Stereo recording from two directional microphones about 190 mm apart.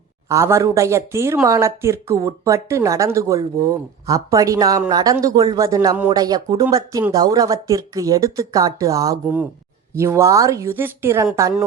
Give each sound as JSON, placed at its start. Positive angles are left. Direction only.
{"t": 0.3, "sound": "speech", "side_deg": -15}